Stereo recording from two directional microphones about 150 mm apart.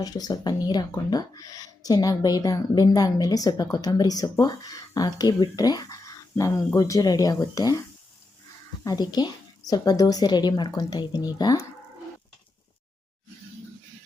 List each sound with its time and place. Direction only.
0.0 s speech: 25° left (ahead or behind)
8.8 s speech: 25° left (ahead or behind)